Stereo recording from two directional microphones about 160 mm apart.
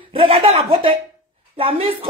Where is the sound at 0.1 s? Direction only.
35° right (ahead or behind).